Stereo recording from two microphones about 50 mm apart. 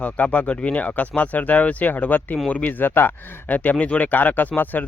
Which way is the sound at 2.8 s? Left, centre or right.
Left.